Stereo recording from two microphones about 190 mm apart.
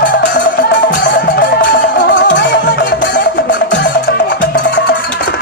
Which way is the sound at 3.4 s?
70° left (ahead or behind).